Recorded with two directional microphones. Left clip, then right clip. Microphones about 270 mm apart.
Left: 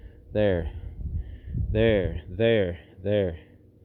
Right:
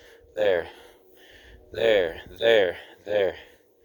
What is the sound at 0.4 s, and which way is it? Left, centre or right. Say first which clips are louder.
Speech: right 6 dB; centre.